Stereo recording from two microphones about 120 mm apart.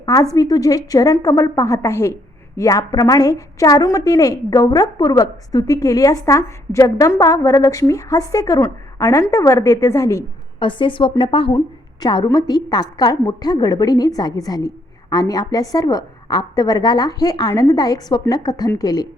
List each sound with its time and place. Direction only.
0.0 s a woman's voice: 30° left (ahead or behind)
10.6 s a woman's voice: 45° left (ahead or behind)
11.5 s a woman's voice: 35° left (ahead or behind)